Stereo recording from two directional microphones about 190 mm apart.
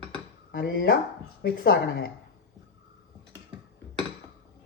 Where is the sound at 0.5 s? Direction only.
55° left (ahead or behind).